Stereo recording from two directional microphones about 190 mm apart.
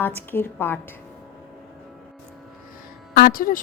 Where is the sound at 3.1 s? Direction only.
50° left (ahead or behind).